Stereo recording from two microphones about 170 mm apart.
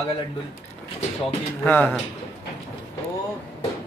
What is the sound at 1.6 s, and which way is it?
Speech, 10° left (ahead or behind).